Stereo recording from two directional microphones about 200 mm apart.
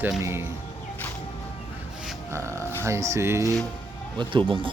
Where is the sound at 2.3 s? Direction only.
15° right (ahead or behind).